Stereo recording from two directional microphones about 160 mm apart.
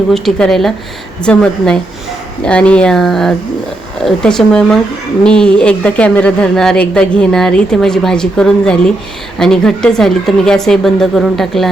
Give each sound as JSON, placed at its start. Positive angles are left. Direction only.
{"t": 0.1, "sound": "a woman's voice", "side_deg": 5}